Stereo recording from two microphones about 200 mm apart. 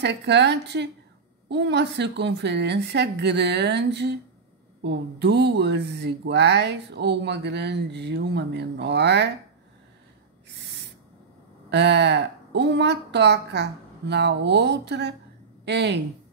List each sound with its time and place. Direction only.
0.0 s speech: 60° right (ahead or behind)
11.7 s a woman's voice: 60° right (ahead or behind)